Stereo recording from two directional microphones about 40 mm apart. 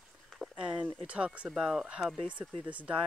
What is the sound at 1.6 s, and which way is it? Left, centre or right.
Speech, centre.